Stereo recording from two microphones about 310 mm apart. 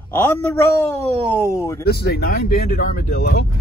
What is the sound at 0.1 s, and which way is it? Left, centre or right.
Speech, centre.